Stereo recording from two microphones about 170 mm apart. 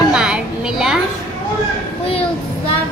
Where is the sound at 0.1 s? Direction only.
5° right (ahead or behind).